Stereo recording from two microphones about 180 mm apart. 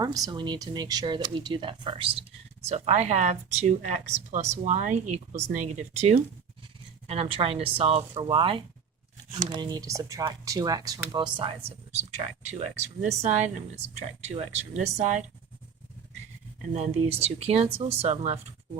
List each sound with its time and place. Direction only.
0.0 s speech: 20° right (ahead or behind)
11.9 s speech: 40° right (ahead or behind)
16.7 s speech: 35° right (ahead or behind)